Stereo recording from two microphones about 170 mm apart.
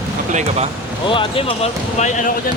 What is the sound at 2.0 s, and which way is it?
Speech, 45° left (ahead or behind).